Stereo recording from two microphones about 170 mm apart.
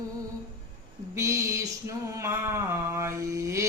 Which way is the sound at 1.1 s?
20° right (ahead or behind).